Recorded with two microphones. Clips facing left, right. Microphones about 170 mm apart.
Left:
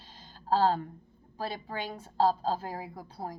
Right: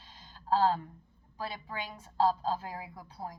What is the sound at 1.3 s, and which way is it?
A woman's voice, 30° left (ahead or behind).